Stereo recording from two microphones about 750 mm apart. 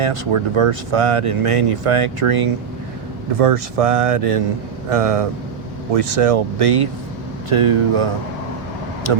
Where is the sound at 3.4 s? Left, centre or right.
Right.